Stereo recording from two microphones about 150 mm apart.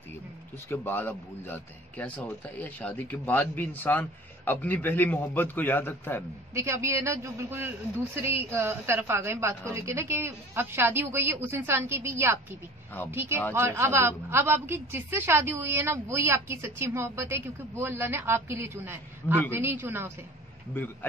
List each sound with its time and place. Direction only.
0.7 s a man's voice: 15° left (ahead or behind)
6.5 s speech: 20° right (ahead or behind)